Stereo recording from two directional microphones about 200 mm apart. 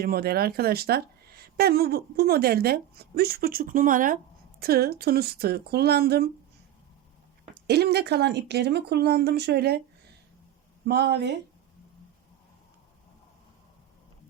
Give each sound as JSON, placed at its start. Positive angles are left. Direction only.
{"t": 0.0, "sound": "speech", "side_deg": -50}
{"t": 7.7, "sound": "speech", "side_deg": -55}
{"t": 10.8, "sound": "speech", "side_deg": -55}